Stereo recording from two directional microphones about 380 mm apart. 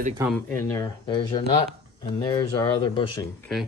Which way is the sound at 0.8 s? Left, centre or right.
Centre.